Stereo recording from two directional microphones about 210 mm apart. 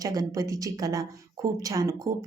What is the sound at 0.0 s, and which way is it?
A woman's voice, 15° right (ahead or behind).